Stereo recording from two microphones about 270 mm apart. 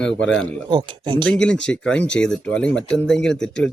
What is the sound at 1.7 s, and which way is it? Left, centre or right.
A man's voice, centre.